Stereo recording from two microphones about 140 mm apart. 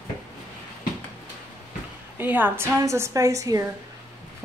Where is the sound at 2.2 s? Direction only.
15° right (ahead or behind).